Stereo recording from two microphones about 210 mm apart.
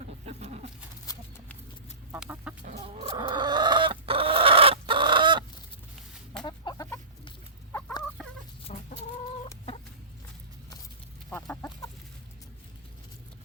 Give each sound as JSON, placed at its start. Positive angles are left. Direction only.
{"t": 0.3, "sound": "a sound", "side_deg": -30}
{"t": 2.1, "sound": "chicken", "side_deg": -5}
{"t": 2.6, "sound": "chicken", "side_deg": -35}
{"t": 6.4, "sound": "chicken", "side_deg": 20}
{"t": 8.7, "sound": "chicken", "side_deg": 35}
{"t": 11.3, "sound": "chicken", "side_deg": 10}